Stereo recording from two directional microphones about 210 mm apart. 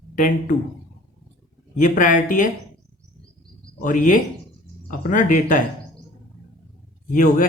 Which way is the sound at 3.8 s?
40° left (ahead or behind).